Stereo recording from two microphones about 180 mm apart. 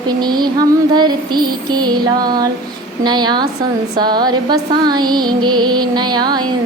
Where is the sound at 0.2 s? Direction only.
25° right (ahead or behind).